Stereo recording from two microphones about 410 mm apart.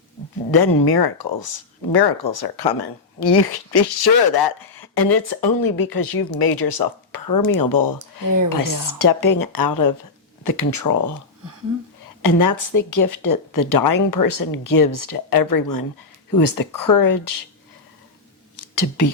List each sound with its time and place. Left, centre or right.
0.5 s speech: left
12.2 s speech: left
18.5 s whispering: left